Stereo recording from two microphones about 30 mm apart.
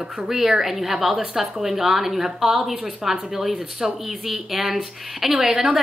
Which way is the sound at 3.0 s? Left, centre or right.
Centre.